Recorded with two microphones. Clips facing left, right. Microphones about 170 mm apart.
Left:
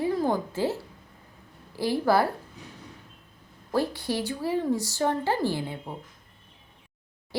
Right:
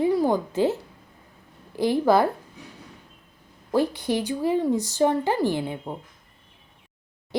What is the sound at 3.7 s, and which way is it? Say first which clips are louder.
Speech: right 4 dB; 15° right (ahead or behind).